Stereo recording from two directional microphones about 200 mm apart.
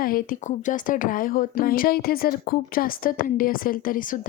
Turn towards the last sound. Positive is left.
turn(degrees=40)  # may be behind; listen again after turning